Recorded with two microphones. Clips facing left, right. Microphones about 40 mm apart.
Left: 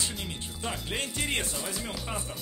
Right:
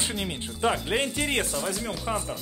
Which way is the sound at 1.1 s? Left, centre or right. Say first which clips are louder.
Right 4 dB; centre.